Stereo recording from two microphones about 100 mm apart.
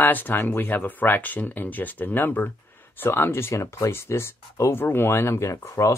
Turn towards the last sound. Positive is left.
turn(degrees=30)  # may be behind; listen again after turning